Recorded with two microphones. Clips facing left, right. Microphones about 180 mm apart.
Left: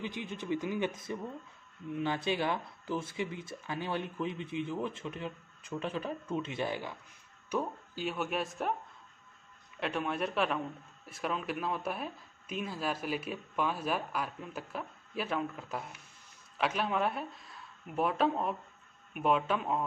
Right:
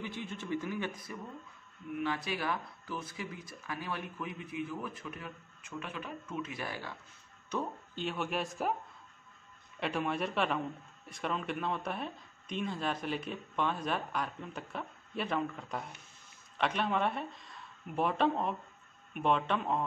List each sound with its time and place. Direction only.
0.0 s speech: 15° left (ahead or behind)
7.4 s speech: 10° left (ahead or behind)
9.8 s speech: centre (ahead or behind)